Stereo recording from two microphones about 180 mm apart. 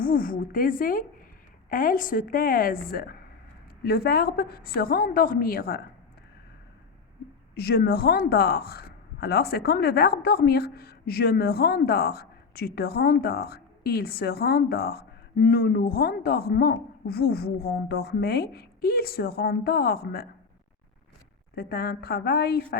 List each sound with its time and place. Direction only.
0.0 s a woman's voice: 50° left (ahead or behind)
7.5 s a woman's voice: 60° left (ahead or behind)
21.5 s a woman's voice: 60° left (ahead or behind)